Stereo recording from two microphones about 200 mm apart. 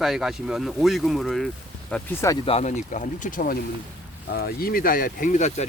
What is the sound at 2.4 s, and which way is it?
Speech, 35° left (ahead or behind).